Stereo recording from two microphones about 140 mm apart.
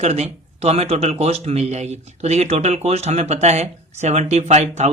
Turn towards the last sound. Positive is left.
turn(degrees=-55)  # may be behind; listen again after turning